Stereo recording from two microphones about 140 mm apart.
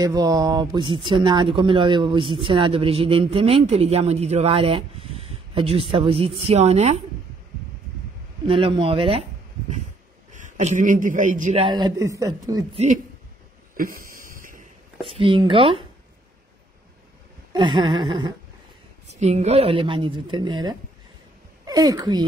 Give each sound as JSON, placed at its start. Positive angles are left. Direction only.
{"t": 0.0, "sound": "speech", "side_deg": -25}
{"t": 8.5, "sound": "speech", "side_deg": -40}
{"t": 10.3, "sound": "a man's voice", "side_deg": -60}
{"t": 11.5, "sound": "speech", "side_deg": -35}
{"t": 12.7, "sound": "speech", "side_deg": -60}
{"t": 13.7, "sound": "a sound", "side_deg": -90}
{"t": 15.0, "sound": "speech", "side_deg": -40}
{"t": 17.5, "sound": "speech", "side_deg": -35}
{"t": 19.0, "sound": "speech", "side_deg": -55}